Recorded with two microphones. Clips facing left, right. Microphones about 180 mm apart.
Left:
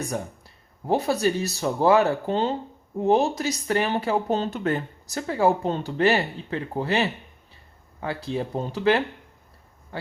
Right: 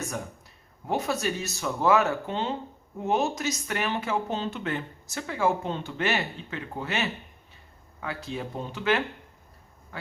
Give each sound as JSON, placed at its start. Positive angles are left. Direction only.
{"t": 0.9, "sound": "speech", "side_deg": 35}